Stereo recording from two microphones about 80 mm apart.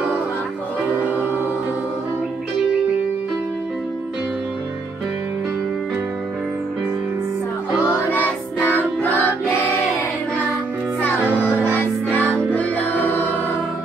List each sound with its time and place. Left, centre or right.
8.1 s music: left
11.6 s music: left